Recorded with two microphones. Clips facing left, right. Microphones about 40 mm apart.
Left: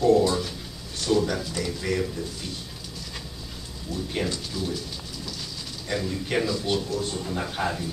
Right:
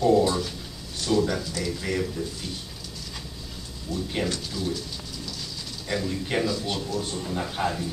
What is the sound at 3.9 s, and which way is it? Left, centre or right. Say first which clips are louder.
Speech: right 1 dB; centre.